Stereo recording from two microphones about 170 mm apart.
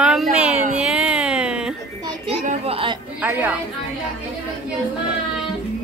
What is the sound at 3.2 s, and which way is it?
Speech, 10° right (ahead or behind).